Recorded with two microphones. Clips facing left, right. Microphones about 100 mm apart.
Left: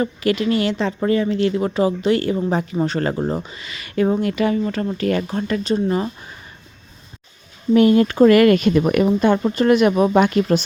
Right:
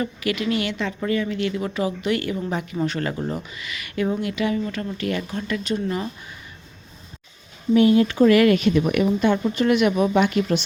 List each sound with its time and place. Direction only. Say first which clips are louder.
0.0 s speech: left 5 dB; 35° left (ahead or behind)
7.7 s speech: left 3 dB; 50° left (ahead or behind)